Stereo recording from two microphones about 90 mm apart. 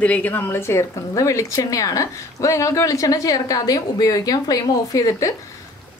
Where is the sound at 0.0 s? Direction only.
20° left (ahead or behind).